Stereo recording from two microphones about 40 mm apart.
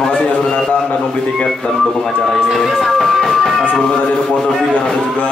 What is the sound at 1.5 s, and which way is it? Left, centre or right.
Speech, centre.